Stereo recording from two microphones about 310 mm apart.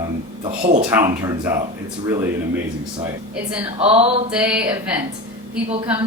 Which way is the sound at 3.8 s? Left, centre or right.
Centre.